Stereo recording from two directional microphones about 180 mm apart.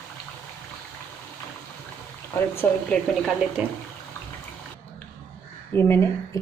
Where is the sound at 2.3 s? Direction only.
10° left (ahead or behind); by 3.6 s 5° right (ahead or behind).